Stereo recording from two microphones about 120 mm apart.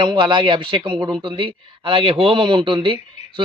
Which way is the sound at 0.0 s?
40° right (ahead or behind).